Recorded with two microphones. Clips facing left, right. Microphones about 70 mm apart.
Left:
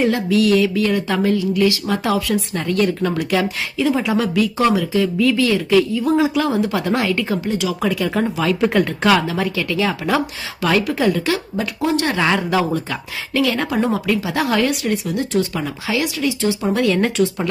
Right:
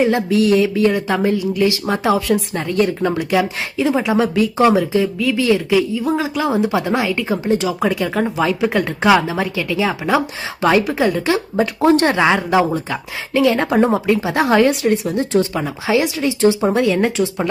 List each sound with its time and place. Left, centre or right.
0.1 s speech: right
5.1 s speech: centre
6.4 s speech: right
7.4 s speech: right
8.6 s speech: centre
9.0 s speech: centre
10.6 s speech: right
10.9 s speech: centre
11.3 s speech: right
12.1 s speech: right
16.8 s speech: centre